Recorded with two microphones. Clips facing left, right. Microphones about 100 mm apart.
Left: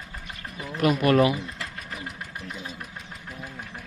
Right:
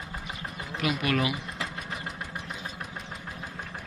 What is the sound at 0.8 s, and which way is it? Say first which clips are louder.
Speech: left 8 dB; 40° left (ahead or behind).